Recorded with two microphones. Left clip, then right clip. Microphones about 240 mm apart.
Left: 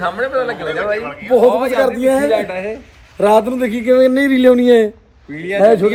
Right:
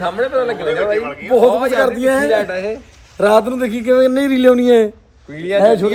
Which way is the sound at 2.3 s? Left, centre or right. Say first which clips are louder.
Right 1 dB; right.